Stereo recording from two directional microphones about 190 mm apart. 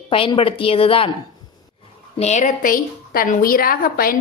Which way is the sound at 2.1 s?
35° left (ahead or behind).